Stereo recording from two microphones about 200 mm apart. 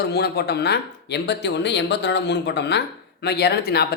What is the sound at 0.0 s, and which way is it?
Speech, 55° left (ahead or behind).